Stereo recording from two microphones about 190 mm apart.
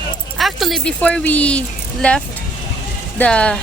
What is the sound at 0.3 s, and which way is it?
A woman's voice, centre (ahead or behind).